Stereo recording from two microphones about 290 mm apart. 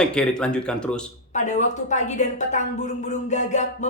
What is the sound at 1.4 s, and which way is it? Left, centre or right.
Music, left.